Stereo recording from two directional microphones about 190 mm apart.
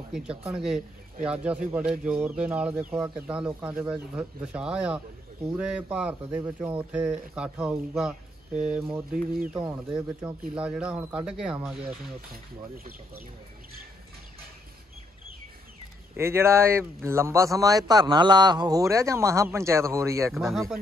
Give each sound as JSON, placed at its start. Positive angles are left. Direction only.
{"t": 0.5, "sound": "a man's voice", "side_deg": 0}
{"t": 12.3, "sound": "speech", "side_deg": -50}
{"t": 16.2, "sound": "a man's voice", "side_deg": -15}
{"t": 20.3, "sound": "speech", "side_deg": 0}